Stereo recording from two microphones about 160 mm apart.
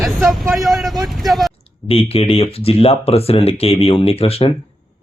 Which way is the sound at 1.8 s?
40° left (ahead or behind).